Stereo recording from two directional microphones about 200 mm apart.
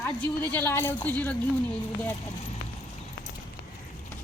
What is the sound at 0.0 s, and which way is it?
A woman's voice, 10° left (ahead or behind).